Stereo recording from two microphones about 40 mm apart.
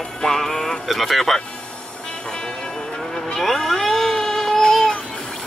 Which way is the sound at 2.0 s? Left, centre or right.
Left.